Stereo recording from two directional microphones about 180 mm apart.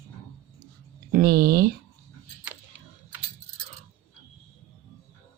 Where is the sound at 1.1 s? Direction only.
55° right (ahead or behind).